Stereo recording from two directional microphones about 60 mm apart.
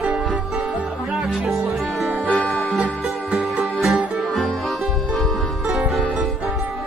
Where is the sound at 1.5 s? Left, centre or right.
Centre.